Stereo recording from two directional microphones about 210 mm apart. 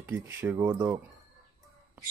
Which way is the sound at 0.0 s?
10° right (ahead or behind).